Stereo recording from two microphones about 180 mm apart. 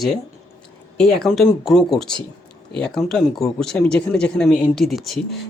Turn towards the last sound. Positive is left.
turn(degrees=0)  # may be behind; listen again after turning